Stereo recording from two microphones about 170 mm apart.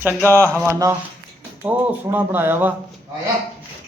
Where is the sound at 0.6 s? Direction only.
15° right (ahead or behind).